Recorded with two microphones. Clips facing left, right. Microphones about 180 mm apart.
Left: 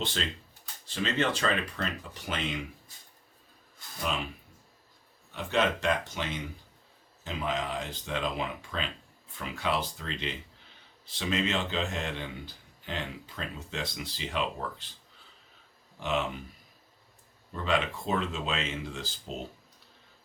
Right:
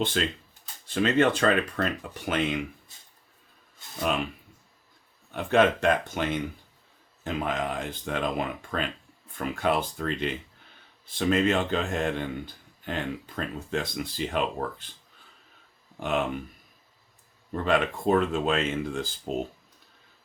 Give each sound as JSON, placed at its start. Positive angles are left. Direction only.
{"t": 0.9, "sound": "speech", "side_deg": -50}
{"t": 5.3, "sound": "speech", "side_deg": -55}
{"t": 16.0, "sound": "speech", "side_deg": -50}
{"t": 17.5, "sound": "speech", "side_deg": -50}